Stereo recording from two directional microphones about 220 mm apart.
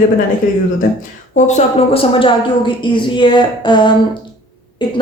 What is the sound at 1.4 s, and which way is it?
A woman's voice, 30° left (ahead or behind).